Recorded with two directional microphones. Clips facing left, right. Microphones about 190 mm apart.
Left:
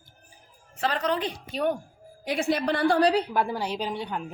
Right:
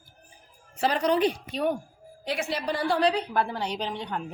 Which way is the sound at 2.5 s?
60° left (ahead or behind).